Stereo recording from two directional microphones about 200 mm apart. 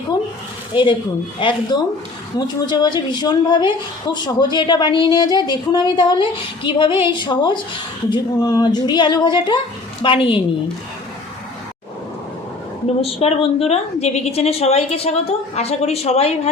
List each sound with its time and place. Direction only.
0.7 s a woman's voice: 25° left (ahead or behind)
13.0 s a woman's voice: 30° left (ahead or behind)